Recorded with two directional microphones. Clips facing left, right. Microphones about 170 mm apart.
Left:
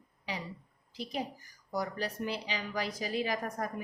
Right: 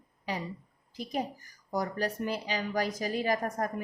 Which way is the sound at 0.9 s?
45° right (ahead or behind).